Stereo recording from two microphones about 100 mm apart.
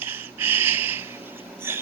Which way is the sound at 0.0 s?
20° right (ahead or behind).